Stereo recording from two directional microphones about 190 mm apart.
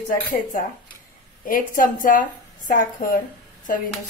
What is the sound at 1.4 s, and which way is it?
A woman's voice, 45° left (ahead or behind).